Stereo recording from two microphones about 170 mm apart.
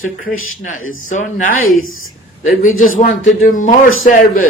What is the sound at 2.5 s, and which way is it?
A man's voice, 55° left (ahead or behind).